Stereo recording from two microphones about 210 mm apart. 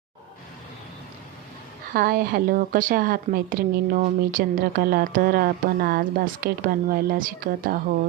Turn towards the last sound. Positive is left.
turn(degrees=-45)  # may be behind; listen again after turning